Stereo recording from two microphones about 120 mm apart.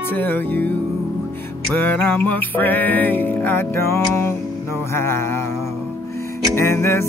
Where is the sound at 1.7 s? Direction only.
15° left (ahead or behind).